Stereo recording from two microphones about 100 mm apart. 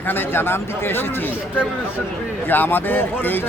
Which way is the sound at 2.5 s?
20° left (ahead or behind).